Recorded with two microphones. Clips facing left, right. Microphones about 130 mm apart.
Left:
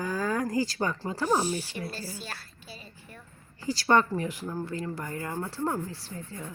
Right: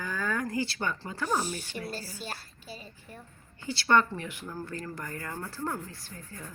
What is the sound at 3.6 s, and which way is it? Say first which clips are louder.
Speech: left 2 dB; 35° left (ahead or behind).